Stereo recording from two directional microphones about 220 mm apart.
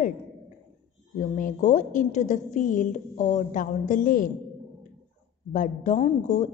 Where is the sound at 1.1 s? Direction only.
35° left (ahead or behind).